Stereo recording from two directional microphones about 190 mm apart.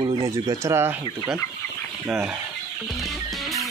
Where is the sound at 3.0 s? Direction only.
Centre (ahead or behind).